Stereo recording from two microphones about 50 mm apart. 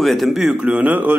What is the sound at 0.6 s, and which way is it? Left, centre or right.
Speech, right.